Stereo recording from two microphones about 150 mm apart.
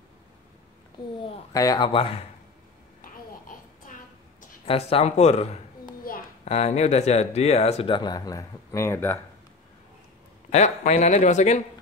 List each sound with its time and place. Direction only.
1.5 s speech: 25° left (ahead or behind)
3.0 s babbling: 65° left (ahead or behind)
4.6 s speech: 40° left (ahead or behind); by 9.2 s 15° left (ahead or behind)
10.5 s speech: 50° left (ahead or behind)